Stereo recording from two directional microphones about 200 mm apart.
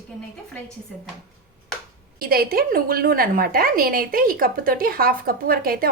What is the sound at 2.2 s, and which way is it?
A woman's voice, 50° right (ahead or behind).